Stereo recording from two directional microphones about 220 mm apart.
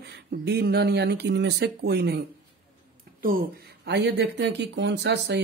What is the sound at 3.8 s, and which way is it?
Speech, 50° right (ahead or behind).